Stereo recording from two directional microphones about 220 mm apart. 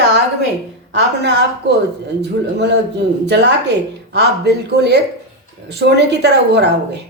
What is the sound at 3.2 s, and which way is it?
A woman's voice, 50° right (ahead or behind).